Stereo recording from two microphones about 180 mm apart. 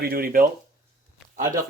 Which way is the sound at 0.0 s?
55° right (ahead or behind).